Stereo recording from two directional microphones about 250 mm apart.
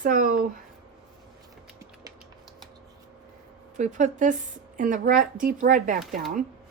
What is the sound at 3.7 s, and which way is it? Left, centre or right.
Speech, right.